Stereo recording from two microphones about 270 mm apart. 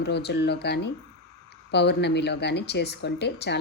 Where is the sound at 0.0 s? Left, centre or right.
Left.